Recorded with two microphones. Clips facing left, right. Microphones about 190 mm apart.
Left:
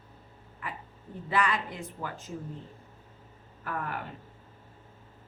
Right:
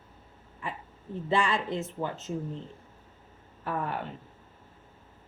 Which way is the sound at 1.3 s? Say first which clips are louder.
Right 2 dB; 25° right (ahead or behind).